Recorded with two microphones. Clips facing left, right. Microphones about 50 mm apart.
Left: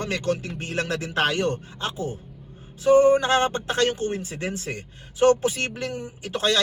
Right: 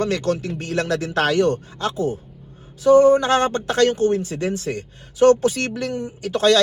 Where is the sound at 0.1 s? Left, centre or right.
Left.